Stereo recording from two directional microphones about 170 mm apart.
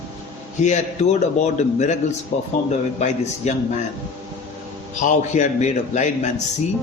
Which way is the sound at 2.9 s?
45° left (ahead or behind).